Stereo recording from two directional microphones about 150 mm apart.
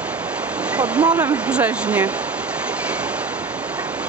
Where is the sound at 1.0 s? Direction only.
20° right (ahead or behind).